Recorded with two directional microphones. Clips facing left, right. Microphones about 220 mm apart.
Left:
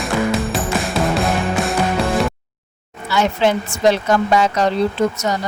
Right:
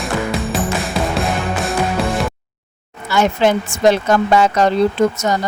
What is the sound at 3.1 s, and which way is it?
Speech, 50° right (ahead or behind).